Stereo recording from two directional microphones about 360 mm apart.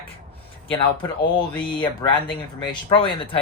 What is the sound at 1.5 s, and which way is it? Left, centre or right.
Speech, centre.